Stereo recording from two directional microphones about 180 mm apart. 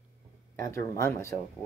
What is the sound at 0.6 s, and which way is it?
Speech, 15° left (ahead or behind).